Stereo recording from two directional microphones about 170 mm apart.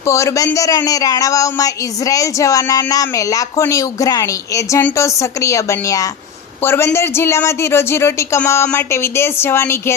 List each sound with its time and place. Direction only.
0.0 s a woman's voice: 15° left (ahead or behind)